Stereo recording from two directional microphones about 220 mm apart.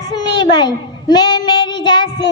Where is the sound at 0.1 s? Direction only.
20° left (ahead or behind).